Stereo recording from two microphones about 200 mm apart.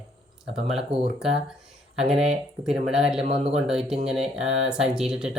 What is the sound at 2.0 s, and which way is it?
Speech, centre (ahead or behind).